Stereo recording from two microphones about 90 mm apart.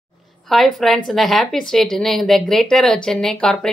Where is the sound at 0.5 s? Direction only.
Centre (ahead or behind).